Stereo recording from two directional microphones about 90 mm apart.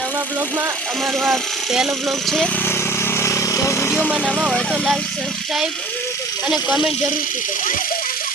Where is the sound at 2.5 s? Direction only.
25° left (ahead or behind).